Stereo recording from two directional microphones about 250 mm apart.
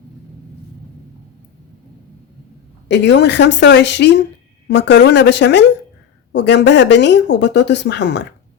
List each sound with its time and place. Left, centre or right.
2.9 s speech: left